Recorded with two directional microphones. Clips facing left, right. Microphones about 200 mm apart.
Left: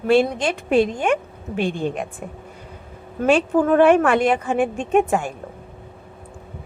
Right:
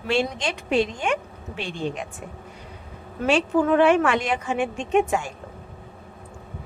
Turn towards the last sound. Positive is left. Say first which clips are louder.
# left 3 dB
turn(degrees=50)  # may be behind; listen again after turning